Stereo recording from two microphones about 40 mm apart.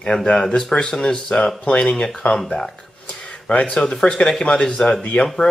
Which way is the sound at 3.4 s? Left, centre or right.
Left.